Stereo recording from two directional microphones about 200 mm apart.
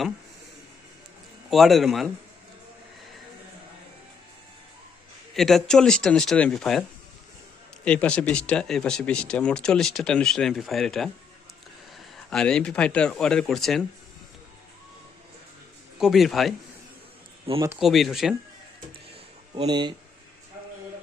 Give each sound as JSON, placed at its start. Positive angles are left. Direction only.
{"t": 1.5, "sound": "speech", "side_deg": 0}
{"t": 5.3, "sound": "speech", "side_deg": 0}
{"t": 7.9, "sound": "speech", "side_deg": 5}
{"t": 12.1, "sound": "speech", "side_deg": 5}
{"t": 16.0, "sound": "speech", "side_deg": 0}
{"t": 17.7, "sound": "speech", "side_deg": 0}
{"t": 19.5, "sound": "speech", "side_deg": -20}